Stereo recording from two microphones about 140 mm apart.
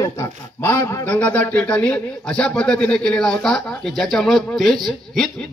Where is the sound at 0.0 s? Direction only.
20° left (ahead or behind).